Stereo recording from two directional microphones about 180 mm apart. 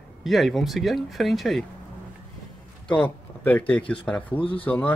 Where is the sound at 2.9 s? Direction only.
10° left (ahead or behind).